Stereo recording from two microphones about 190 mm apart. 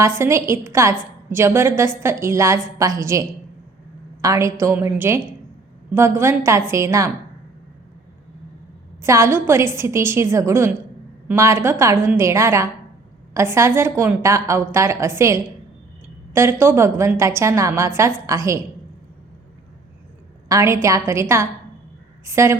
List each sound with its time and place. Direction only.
0.2 s a woman's voice: 15° right (ahead or behind)
9.0 s a woman's voice: 15° right (ahead or behind)
20.5 s a woman's voice: 15° right (ahead or behind)